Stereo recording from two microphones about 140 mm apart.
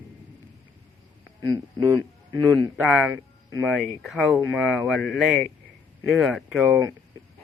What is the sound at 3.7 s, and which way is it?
Speech, 5° left (ahead or behind).